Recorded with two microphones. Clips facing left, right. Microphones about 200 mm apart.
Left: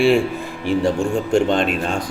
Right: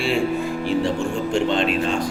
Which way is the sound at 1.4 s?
45° left (ahead or behind).